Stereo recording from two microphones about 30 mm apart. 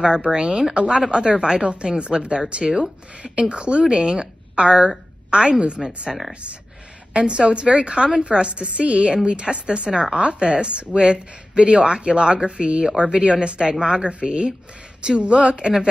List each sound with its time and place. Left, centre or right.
0.0 s a woman's voice: right
6.1 s speech: centre
7.2 s a woman's voice: right
10.2 s a woman's voice: right
10.9 s a woman's voice: right
12.8 s a woman's voice: right